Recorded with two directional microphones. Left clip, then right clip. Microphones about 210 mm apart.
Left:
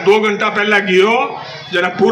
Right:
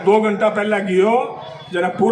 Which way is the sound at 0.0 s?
55° right (ahead or behind).